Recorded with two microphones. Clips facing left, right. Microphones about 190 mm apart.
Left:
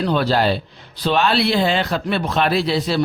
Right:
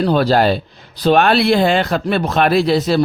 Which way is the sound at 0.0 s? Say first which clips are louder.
Right 4 dB; 40° right (ahead or behind).